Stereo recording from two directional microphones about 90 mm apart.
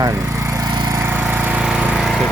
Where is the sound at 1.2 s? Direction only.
20° right (ahead or behind).